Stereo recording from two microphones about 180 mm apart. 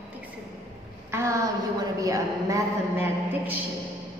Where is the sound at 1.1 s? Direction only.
15° right (ahead or behind).